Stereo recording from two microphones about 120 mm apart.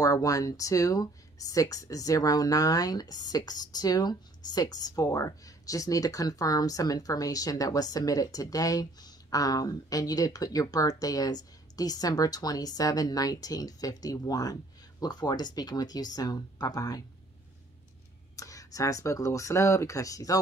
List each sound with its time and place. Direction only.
0.0 s speech: 30° left (ahead or behind)
18.3 s speech: 30° left (ahead or behind)